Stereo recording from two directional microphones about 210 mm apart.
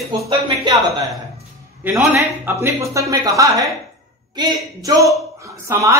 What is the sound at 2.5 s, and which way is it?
A woman's voice, 15° right (ahead or behind).